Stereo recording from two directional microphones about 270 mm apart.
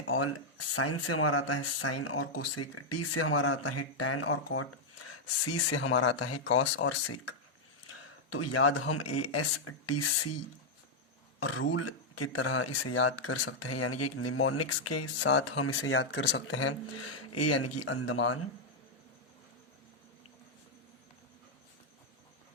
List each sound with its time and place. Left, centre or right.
0.1 s speech: left
11.3 s speech: left